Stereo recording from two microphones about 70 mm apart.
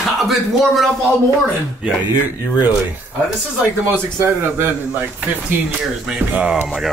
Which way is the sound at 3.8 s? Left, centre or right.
Right.